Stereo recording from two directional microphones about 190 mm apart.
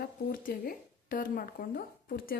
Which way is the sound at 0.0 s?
55° left (ahead or behind).